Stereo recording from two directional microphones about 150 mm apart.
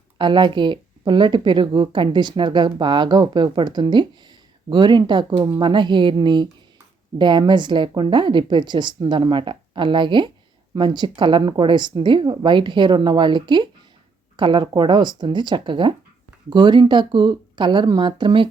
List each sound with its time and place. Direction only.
0.2 s speech: 30° right (ahead or behind)